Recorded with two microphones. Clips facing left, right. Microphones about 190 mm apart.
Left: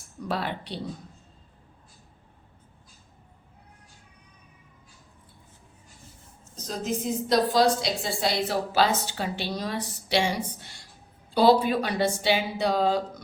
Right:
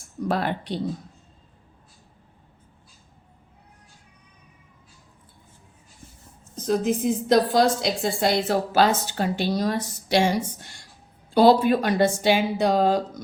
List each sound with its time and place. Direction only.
0.3 s a woman's voice: 50° right (ahead or behind)
6.6 s a woman's voice: 55° right (ahead or behind)